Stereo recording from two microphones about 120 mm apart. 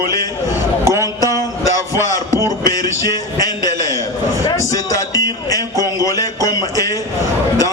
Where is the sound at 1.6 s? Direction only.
25° left (ahead or behind).